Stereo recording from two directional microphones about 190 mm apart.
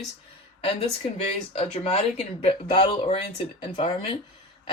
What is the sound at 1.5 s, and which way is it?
Speech, 35° left (ahead or behind).